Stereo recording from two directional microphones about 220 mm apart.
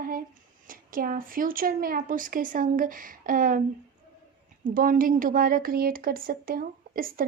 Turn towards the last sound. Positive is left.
turn(degrees=-40)  # may be behind; listen again after turning